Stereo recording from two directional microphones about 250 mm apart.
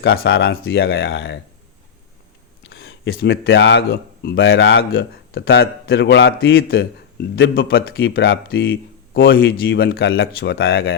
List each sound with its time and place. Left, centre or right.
0.0 s speech: left
2.6 s speech: left